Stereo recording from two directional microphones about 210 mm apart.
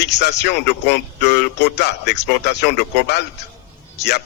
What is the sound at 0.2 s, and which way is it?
Speech, 50° left (ahead or behind).